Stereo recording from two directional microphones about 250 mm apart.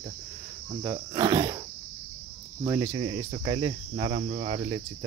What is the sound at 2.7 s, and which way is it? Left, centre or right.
Cricket, centre.